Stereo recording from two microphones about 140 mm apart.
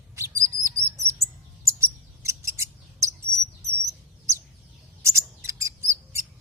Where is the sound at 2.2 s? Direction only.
20° right (ahead or behind).